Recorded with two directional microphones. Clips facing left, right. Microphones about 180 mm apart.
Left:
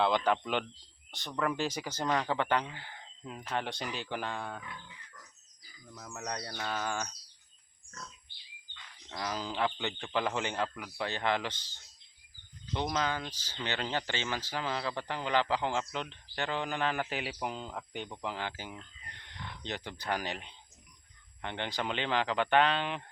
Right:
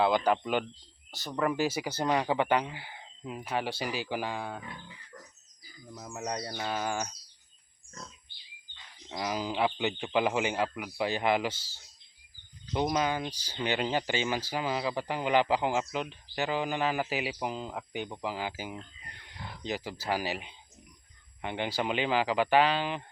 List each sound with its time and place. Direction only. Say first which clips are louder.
0.3 s speech: right 3 dB; 5° right (ahead or behind)
4.6 s wild animals: right 3 dB; 30° right (ahead or behind)
5.9 s speech: right 4 dB; 20° right (ahead or behind)
9.0 s speech: right 4 dB; 15° right (ahead or behind)
19.2 s wild animals: right 1 dB; 10° right (ahead or behind)
19.6 s speech: right 4 dB; 5° right (ahead or behind)